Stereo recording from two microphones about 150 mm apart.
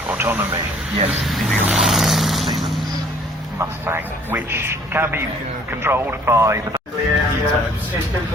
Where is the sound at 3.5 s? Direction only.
15° right (ahead or behind).